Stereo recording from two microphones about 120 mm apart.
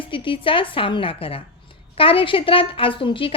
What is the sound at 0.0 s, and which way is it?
A woman's voice, 45° left (ahead or behind).